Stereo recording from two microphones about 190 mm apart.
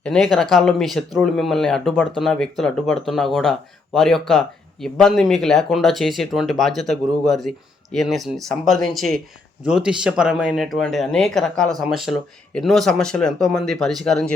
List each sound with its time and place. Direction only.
0.0 s speech: 5° left (ahead or behind)